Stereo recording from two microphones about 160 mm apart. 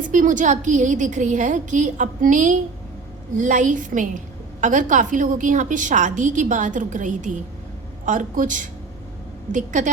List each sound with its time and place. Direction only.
0.1 s a woman's voice: 55° right (ahead or behind)